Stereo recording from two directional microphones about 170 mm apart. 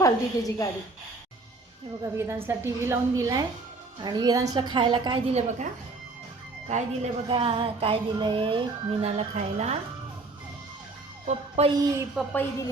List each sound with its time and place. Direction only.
0.0 s a woman's voice: 20° left (ahead or behind)
2.0 s a woman's voice: 15° right (ahead or behind)
5.3 s music: 40° right (ahead or behind)
6.7 s music: 40° right (ahead or behind)
11.3 s music: 40° right (ahead or behind)
12.2 s speech: centre (ahead or behind)